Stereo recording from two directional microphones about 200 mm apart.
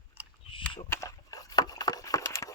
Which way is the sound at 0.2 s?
10° right (ahead or behind).